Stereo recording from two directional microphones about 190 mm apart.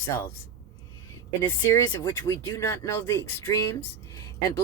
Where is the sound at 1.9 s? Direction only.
15° left (ahead or behind).